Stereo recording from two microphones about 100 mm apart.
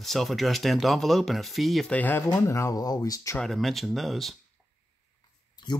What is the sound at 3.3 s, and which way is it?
Speech, 5° left (ahead or behind).